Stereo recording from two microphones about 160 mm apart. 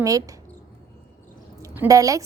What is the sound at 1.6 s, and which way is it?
Speech, 20° right (ahead or behind).